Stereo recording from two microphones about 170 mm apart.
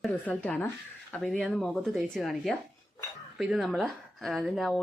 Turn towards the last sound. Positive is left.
turn(degrees=0)  # may be behind; listen again after turning